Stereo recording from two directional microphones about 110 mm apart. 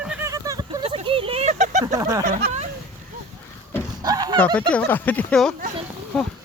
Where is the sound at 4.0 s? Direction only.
35° right (ahead or behind).